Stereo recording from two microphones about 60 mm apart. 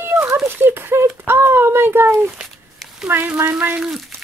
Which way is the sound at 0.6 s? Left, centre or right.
Right.